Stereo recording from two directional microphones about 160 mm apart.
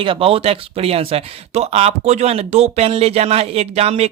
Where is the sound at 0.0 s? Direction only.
35° right (ahead or behind).